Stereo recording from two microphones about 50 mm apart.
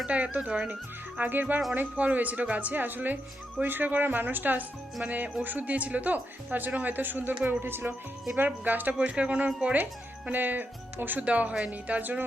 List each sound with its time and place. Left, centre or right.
0.1 s speech: right
1.2 s speech: right
8.4 s speech: right
10.3 s speech: right